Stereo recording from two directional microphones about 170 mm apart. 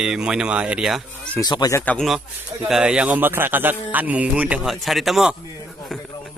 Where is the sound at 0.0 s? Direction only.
5° right (ahead or behind).